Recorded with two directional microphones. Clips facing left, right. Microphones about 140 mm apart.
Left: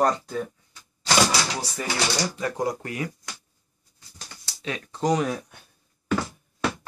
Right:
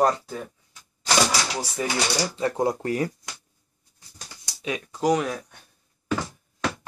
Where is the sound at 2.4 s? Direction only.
25° right (ahead or behind).